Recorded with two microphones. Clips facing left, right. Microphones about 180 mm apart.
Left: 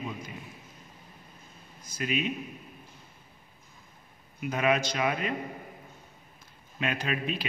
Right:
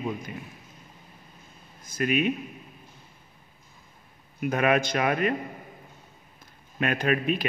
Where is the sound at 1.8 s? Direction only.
55° right (ahead or behind).